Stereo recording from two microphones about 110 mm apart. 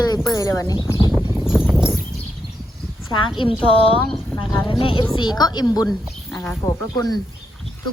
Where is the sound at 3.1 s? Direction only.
50° left (ahead or behind).